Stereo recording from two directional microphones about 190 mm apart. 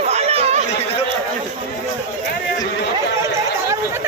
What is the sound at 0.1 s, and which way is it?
Chatter, 35° right (ahead or behind).